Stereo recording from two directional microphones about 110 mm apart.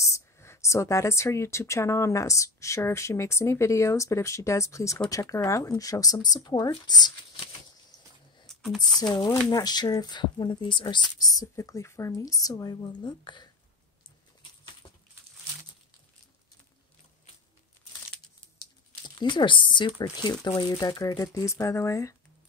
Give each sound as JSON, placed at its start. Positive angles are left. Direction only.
{"t": 0.0, "sound": "speech", "side_deg": 25}
{"t": 8.5, "sound": "a sound", "side_deg": 5}
{"t": 9.0, "sound": "speech", "side_deg": 45}
{"t": 11.1, "sound": "speech", "side_deg": 35}
{"t": 18.6, "sound": "speech", "side_deg": 40}